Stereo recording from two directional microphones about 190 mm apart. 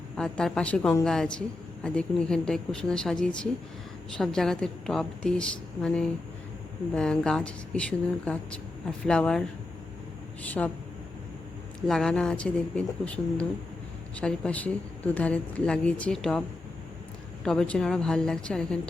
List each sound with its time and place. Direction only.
0.2 s a woman's voice: 5° left (ahead or behind)
10.4 s speech: 10° left (ahead or behind)
11.9 s a woman's voice: centre (ahead or behind)
17.4 s a woman's voice: 5° left (ahead or behind)